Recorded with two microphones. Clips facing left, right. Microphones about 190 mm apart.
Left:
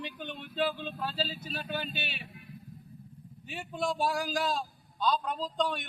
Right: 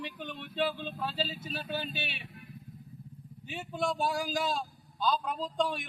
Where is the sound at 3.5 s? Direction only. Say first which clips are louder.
Even; centre (ahead or behind).